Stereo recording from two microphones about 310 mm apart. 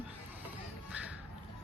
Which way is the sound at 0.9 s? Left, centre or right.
Centre.